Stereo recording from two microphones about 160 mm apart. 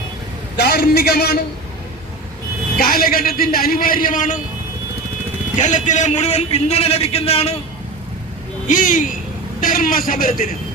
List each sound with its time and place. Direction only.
0.5 s a man's voice: 90° left
2.7 s a man's voice: 70° left (ahead or behind)
5.5 s a man's voice: 50° left (ahead or behind)
8.6 s a man's voice: 55° left (ahead or behind)